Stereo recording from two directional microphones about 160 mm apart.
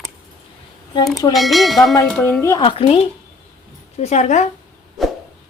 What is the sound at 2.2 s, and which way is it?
Speech, 15° left (ahead or behind).